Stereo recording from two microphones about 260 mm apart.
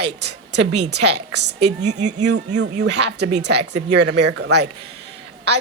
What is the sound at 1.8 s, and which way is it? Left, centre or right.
Speech, right.